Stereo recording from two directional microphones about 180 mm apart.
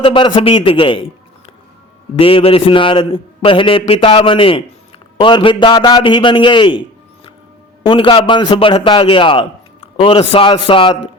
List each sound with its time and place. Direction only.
0.0 s a man's voice: 30° left (ahead or behind)
2.1 s a man's voice: 30° left (ahead or behind)
7.9 s a man's voice: 30° left (ahead or behind)